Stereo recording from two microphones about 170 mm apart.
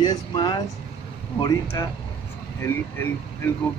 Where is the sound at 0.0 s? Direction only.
25° left (ahead or behind).